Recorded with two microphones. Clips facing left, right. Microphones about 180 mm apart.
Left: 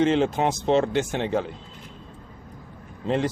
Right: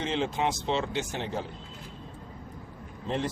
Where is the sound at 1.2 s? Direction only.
90° left.